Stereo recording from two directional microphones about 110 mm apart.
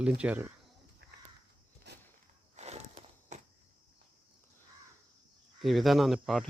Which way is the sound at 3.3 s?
90° right.